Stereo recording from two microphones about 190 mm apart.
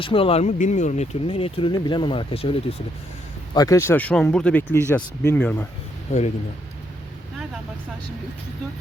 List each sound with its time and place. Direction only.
0.0 s speech: 30° left (ahead or behind)
3.5 s speech: 20° left (ahead or behind)